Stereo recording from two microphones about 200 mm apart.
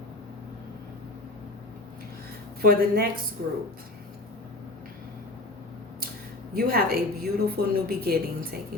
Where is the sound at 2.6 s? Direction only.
50° right (ahead or behind).